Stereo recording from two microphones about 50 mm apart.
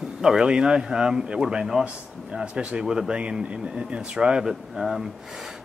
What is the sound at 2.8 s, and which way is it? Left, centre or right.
Speech, centre.